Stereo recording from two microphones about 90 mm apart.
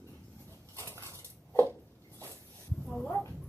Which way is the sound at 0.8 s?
30° left (ahead or behind).